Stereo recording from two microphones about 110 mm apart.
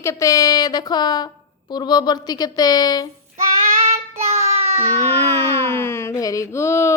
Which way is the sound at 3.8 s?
85° right.